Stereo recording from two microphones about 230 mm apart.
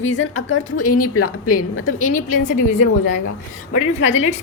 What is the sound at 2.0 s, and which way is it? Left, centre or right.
Speech, left.